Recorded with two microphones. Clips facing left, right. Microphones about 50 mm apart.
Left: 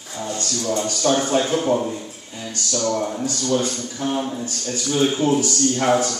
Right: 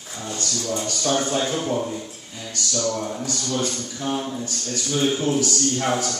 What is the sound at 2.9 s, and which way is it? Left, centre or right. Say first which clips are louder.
A man's voice: left 4 dB; left.